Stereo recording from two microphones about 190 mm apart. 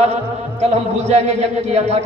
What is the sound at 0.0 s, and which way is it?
Speech, 35° right (ahead or behind).